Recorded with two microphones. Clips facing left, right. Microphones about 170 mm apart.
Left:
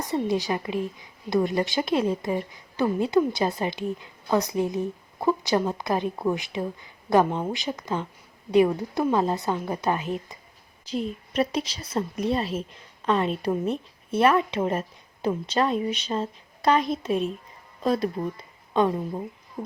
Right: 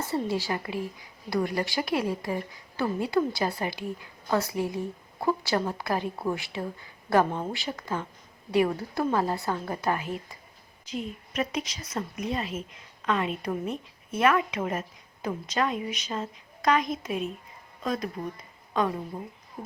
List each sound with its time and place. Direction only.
0.3 s a woman's voice: 20° left (ahead or behind)
10.8 s a woman's voice: 35° left (ahead or behind)